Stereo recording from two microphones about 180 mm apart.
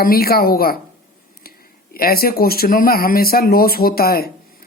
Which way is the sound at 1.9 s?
55° left (ahead or behind).